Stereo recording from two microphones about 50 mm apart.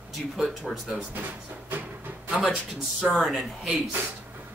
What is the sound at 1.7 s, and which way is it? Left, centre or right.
Music, right.